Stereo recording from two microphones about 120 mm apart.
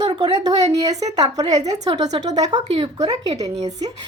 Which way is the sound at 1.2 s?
35° right (ahead or behind).